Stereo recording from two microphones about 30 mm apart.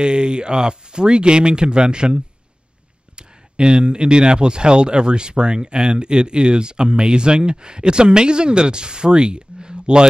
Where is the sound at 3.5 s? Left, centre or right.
Right.